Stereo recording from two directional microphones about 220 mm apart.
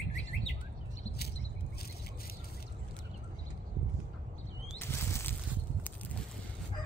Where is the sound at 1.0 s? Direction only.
45° left (ahead or behind).